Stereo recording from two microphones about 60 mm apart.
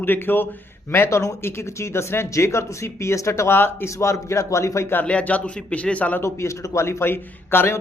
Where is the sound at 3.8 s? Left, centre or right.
Left.